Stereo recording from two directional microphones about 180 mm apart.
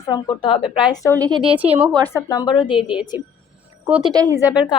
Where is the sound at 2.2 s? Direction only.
25° left (ahead or behind).